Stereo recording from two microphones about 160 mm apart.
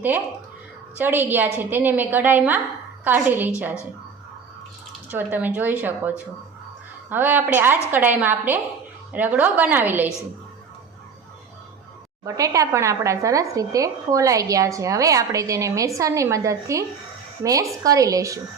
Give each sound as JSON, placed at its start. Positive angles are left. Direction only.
{"t": 0.9, "sound": "a woman's voice", "side_deg": -15}
{"t": 5.1, "sound": "a woman's voice", "side_deg": -10}
{"t": 12.2, "sound": "speech", "side_deg": -20}